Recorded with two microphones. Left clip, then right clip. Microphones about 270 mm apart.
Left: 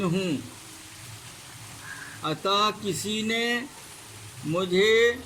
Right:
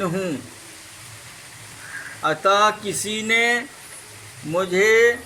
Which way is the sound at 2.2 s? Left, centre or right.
Right.